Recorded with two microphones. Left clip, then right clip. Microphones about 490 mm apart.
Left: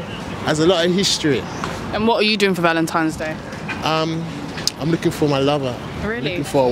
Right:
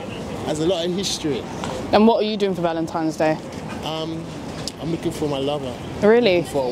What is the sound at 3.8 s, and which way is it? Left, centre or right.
Speech, left.